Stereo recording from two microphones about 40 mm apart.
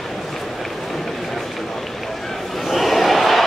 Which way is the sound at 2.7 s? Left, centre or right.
Centre.